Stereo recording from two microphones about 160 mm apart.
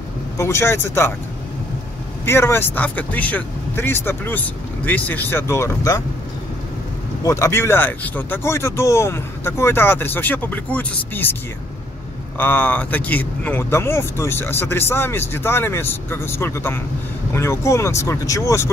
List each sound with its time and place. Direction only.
0.4 s speech: 15° left (ahead or behind)
2.2 s speech: 15° left (ahead or behind)
7.2 s speech: 15° left (ahead or behind)
12.4 s speech: 10° left (ahead or behind)